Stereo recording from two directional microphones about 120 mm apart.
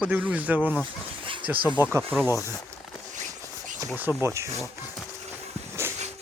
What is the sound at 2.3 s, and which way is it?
Speech, 25° left (ahead or behind).